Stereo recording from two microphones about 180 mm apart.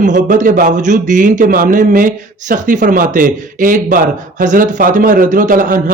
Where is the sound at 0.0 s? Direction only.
45° right (ahead or behind).